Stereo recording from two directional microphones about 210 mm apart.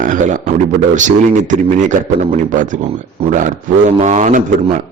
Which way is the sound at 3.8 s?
35° right (ahead or behind).